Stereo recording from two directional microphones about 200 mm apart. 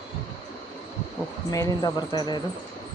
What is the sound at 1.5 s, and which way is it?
Speech, 15° left (ahead or behind).